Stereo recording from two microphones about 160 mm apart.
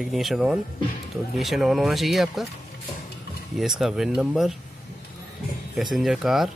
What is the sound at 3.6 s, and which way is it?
Speech, centre (ahead or behind).